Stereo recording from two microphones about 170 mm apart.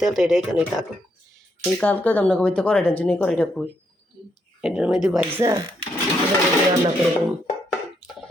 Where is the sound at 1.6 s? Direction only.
10° left (ahead or behind).